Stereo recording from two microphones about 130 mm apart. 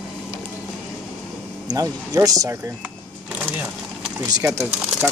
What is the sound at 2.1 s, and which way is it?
Speech, 30° right (ahead or behind).